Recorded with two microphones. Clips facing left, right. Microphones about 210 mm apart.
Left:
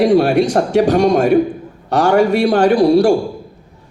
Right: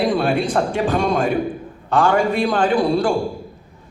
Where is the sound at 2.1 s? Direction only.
70° left (ahead or behind).